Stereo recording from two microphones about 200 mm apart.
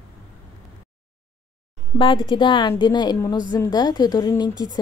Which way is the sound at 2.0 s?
25° left (ahead or behind).